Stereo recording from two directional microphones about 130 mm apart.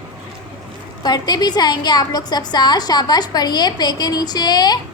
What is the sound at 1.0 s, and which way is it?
A woman's voice, 30° left (ahead or behind).